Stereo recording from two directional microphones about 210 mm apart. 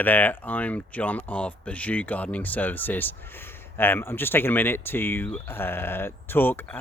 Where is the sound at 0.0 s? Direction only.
10° left (ahead or behind).